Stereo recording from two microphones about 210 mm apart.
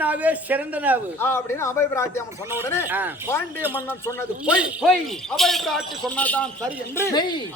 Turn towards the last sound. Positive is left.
turn(degrees=20)  # may be behind; listen again after turning